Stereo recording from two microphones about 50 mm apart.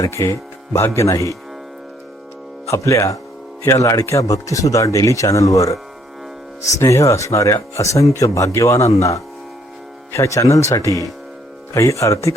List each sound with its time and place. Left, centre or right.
0.1 s speech: left
0.9 s speech: left
2.6 s speech: left
10.1 s speech: left